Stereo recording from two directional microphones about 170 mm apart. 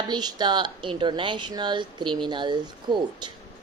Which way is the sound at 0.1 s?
25° right (ahead or behind).